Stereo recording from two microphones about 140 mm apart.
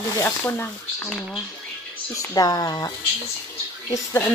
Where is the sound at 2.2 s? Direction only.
25° left (ahead or behind).